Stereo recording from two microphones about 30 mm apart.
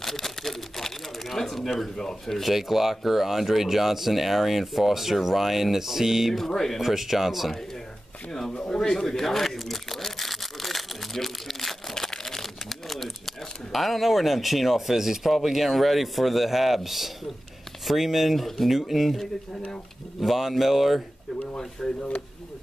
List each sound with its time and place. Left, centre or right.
0.0 s a sound: centre
2.0 s speech: centre
2.4 s speech: centre
6.3 s speech: centre
6.8 s speech: centre
8.3 s speech: centre
9.0 s a sound: centre
11.9 s typewriter: centre
15.3 s speech: centre
21.8 s speech: left